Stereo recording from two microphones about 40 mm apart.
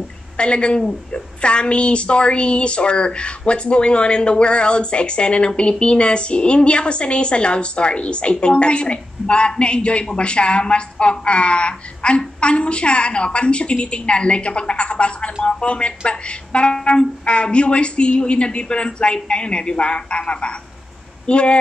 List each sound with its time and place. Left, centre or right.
0.4 s a woman's voice: left